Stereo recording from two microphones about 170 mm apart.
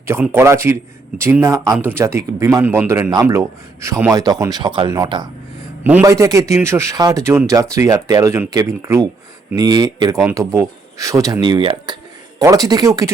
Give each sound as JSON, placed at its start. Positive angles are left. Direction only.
{"t": 0.0, "sound": "a man's voice", "side_deg": -15}
{"t": 5.8, "sound": "a man's voice", "side_deg": -15}